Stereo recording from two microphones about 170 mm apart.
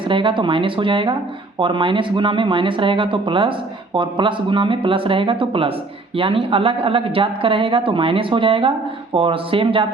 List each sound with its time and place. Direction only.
0.0 s speech: 30° right (ahead or behind)